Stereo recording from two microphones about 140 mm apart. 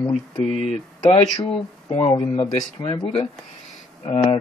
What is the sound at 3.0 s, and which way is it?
Speech, 45° left (ahead or behind).